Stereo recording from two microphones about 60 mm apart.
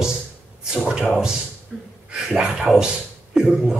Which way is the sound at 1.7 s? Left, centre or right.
Centre.